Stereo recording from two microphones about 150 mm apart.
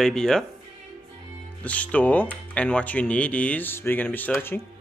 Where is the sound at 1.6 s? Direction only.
10° left (ahead or behind).